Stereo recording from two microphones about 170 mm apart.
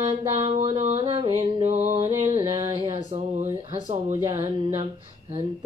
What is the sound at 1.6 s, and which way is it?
Mantra, 40° right (ahead or behind).